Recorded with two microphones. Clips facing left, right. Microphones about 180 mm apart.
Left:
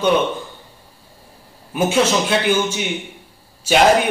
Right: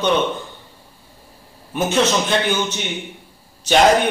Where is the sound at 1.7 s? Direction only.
10° left (ahead or behind).